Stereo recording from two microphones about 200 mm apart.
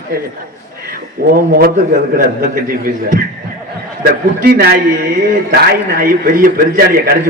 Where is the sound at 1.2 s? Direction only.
45° right (ahead or behind).